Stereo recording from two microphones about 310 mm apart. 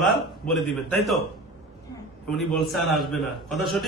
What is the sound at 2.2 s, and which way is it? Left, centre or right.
A man's voice, centre.